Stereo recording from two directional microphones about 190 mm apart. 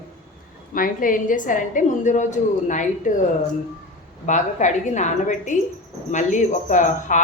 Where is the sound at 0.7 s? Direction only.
45° left (ahead or behind).